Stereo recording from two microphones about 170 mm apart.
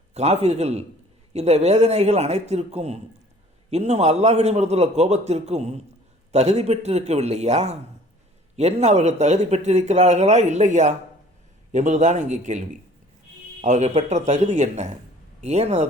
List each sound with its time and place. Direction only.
0.1 s speech: 40° right (ahead or behind)